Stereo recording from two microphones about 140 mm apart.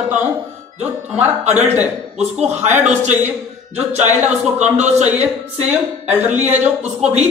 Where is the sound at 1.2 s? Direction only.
55° right (ahead or behind).